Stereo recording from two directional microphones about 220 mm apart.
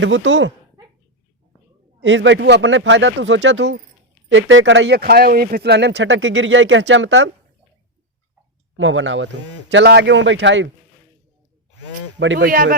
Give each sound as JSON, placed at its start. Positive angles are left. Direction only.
{"t": 0.0, "sound": "speech", "side_deg": -60}
{"t": 2.0, "sound": "speech", "side_deg": -55}
{"t": 8.7, "sound": "speech", "side_deg": -60}
{"t": 12.2, "sound": "speech", "side_deg": -55}
{"t": 12.5, "sound": "speech", "side_deg": -40}